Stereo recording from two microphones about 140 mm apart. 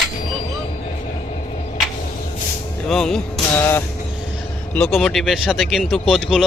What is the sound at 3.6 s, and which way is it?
Vehicle, 20° left (ahead or behind).